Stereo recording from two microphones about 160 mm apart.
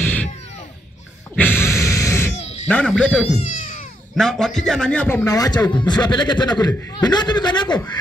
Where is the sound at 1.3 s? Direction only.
10° left (ahead or behind).